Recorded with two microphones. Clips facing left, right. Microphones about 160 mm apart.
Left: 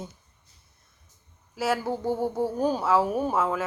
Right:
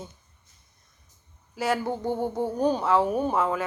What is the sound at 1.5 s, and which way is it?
A woman's voice, 5° left (ahead or behind).